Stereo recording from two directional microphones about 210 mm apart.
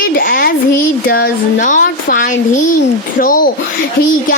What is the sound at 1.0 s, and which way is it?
A child's voice, 45° left (ahead or behind).